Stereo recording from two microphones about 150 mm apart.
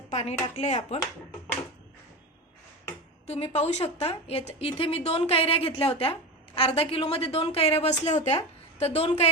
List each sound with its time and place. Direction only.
0.1 s speech: 50° left (ahead or behind)
3.2 s speech: 45° left (ahead or behind)